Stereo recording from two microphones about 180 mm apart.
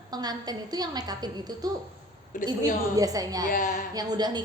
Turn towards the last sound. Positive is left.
turn(degrees=-25)  # may be behind; listen again after turning